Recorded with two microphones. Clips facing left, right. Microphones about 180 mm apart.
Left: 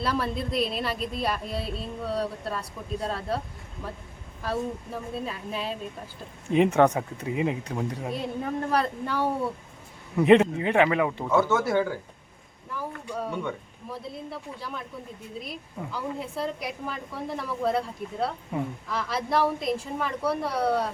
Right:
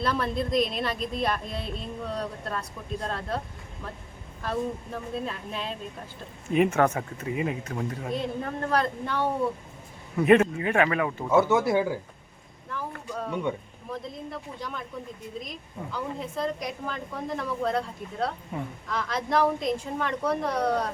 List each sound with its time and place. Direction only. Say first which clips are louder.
0.0 s a woman's voice: right 1 dB; 5° left (ahead or behind)
4.4 s speech: even; 5° left (ahead or behind)
6.5 s speech: left 2 dB; 25° left (ahead or behind)
11.3 s speech: right 3 dB; 15° right (ahead or behind)
12.7 s a woman's voice: left 1 dB; 10° left (ahead or behind)